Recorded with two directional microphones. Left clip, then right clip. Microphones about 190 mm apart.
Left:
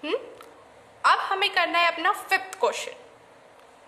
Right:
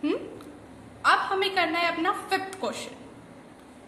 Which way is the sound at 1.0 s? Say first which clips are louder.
Left 1 dB; 30° left (ahead or behind).